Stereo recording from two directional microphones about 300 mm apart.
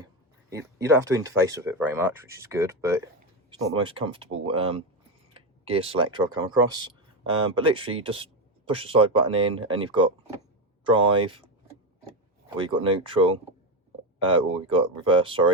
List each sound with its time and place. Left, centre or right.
0.9 s speech: centre
12.5 s speech: centre